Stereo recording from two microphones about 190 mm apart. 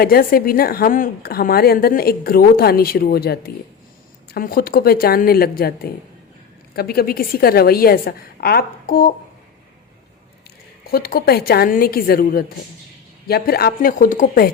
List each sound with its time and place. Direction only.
0.0 s a woman's voice: 50° left (ahead or behind)
10.9 s a woman's voice: 50° left (ahead or behind)